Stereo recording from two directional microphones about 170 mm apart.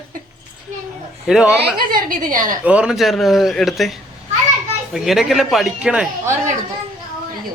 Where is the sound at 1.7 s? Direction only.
55° right (ahead or behind).